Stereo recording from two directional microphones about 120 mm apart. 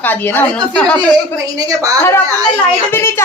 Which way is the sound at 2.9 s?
20° left (ahead or behind).